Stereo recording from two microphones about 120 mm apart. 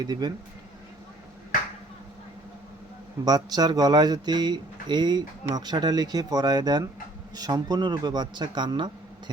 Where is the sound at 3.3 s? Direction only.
35° right (ahead or behind).